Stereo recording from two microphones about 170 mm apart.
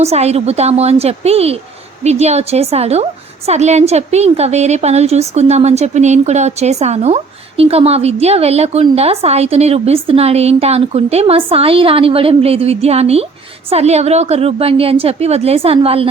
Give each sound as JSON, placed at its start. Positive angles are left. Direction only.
{"t": 0.0, "sound": "a woman's voice", "side_deg": -40}